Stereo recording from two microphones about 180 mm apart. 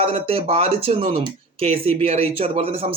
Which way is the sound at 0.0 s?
30° right (ahead or behind).